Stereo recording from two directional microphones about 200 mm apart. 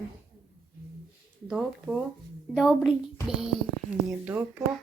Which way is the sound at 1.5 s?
5° right (ahead or behind).